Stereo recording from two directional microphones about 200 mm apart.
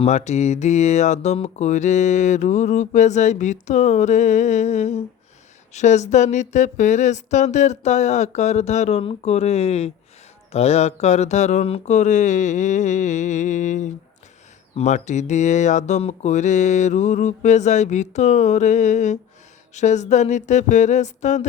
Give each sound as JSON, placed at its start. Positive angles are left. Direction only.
{"t": 0.0, "sound": "speech", "side_deg": 35}